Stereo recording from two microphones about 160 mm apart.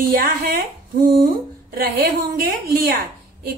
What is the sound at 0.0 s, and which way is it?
Speech, 60° right (ahead or behind).